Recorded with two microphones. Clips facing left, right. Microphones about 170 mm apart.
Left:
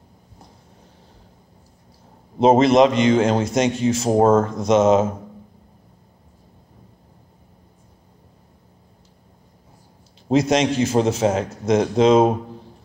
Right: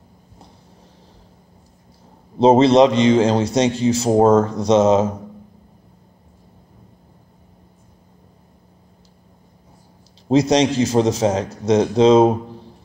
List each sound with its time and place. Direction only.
2.3 s a man's voice: 30° right (ahead or behind)
10.3 s a man's voice: 35° right (ahead or behind)